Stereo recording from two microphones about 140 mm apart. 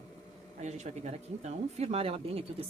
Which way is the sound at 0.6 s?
55° right (ahead or behind).